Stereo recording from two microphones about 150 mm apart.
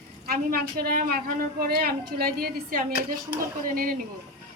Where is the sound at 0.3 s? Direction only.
90° right; by 3.9 s 70° right (ahead or behind).